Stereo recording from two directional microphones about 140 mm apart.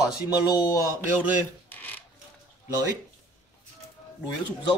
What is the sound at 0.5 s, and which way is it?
Speech, 25° left (ahead or behind).